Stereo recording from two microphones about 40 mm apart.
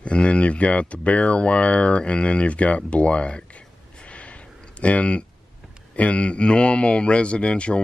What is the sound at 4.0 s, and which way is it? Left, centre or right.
Snort, left.